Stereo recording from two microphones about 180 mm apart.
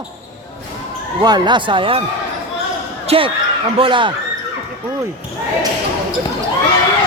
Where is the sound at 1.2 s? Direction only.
25° right (ahead or behind).